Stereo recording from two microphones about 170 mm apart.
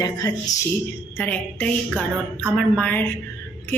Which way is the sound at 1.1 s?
10° left (ahead or behind).